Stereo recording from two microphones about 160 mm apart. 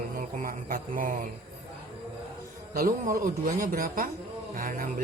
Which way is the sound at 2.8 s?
60° right (ahead or behind).